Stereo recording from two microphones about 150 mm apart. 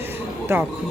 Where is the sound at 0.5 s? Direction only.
15° right (ahead or behind).